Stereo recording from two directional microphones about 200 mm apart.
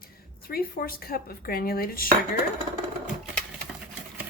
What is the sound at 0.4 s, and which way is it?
A woman's voice, 50° left (ahead or behind).